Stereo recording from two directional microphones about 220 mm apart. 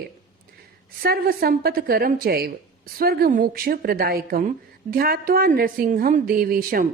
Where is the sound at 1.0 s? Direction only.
45° right (ahead or behind).